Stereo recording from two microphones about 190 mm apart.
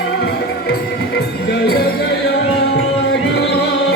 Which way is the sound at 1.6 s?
55° left (ahead or behind).